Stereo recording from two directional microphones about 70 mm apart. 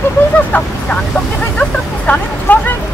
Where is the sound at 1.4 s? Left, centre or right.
Left.